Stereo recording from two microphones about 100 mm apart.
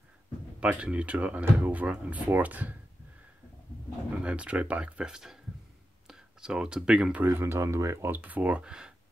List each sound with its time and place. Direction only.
0.6 s speech: 10° right (ahead or behind)
4.2 s speech: 10° right (ahead or behind)
7.2 s speech: 25° right (ahead or behind); by 8.9 s 10° right (ahead or behind)